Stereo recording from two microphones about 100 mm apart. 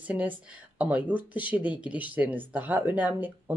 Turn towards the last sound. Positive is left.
turn(degrees=-15)  # may be behind; listen again after turning